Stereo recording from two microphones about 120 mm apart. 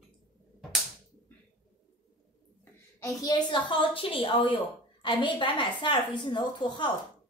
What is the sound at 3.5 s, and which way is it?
A woman's voice, 40° left (ahead or behind).